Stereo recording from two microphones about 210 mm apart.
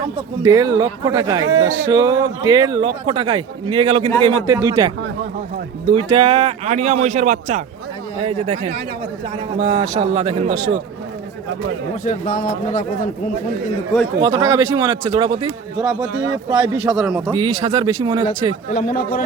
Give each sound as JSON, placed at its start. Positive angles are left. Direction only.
{"t": 0.4, "sound": "a man's voice", "side_deg": -15}
{"t": 4.2, "sound": "speech", "side_deg": -20}
{"t": 5.9, "sound": "a man's voice", "side_deg": -25}
{"t": 12.0, "sound": "a man's voice", "side_deg": 40}
{"t": 14.2, "sound": "a man's voice", "side_deg": -20}
{"t": 16.1, "sound": "speech", "side_deg": -65}
{"t": 16.5, "sound": "a man's voice", "side_deg": -20}
{"t": 16.7, "sound": "speech", "side_deg": -5}
{"t": 17.2, "sound": "a man's voice", "side_deg": -15}
{"t": 18.7, "sound": "a man's voice", "side_deg": 40}